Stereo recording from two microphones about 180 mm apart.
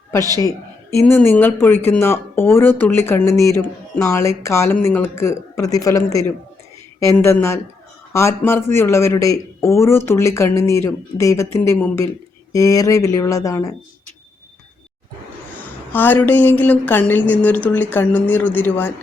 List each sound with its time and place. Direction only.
0.9 s speech: 10° left (ahead or behind)
15.9 s speech: 10° left (ahead or behind)